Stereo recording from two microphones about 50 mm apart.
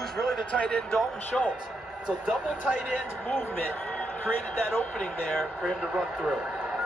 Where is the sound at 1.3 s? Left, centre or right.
Centre.